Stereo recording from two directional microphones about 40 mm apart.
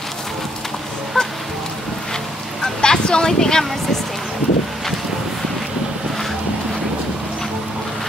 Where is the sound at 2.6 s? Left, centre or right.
Centre.